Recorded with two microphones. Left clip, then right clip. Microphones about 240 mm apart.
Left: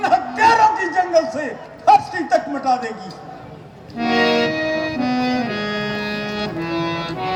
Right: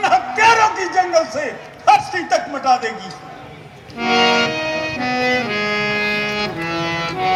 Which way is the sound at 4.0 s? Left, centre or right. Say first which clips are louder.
Right 2 dB; left.